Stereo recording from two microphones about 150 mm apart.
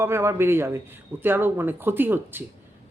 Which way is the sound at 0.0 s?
15° right (ahead or behind).